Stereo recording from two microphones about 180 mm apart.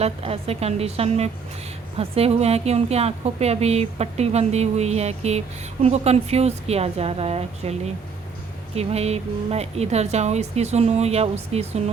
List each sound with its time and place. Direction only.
0.0 s a woman's voice: 35° right (ahead or behind)